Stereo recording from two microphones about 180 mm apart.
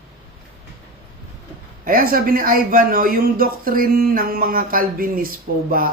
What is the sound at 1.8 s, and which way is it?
A man's voice, 50° right (ahead or behind).